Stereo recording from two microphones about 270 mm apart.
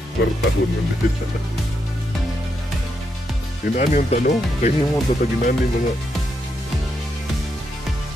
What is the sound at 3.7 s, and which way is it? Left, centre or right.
Speech, left.